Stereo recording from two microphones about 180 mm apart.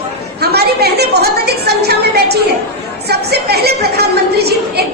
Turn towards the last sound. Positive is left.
turn(degrees=-65)  # may be behind; listen again after turning